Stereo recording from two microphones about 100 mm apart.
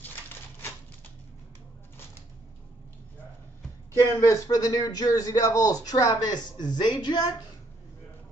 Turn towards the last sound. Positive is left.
turn(degrees=45)  # may be behind; listen again after turning